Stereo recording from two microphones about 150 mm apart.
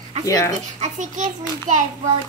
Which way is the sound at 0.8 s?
55° right (ahead or behind).